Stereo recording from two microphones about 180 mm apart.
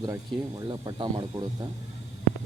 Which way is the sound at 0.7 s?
25° right (ahead or behind).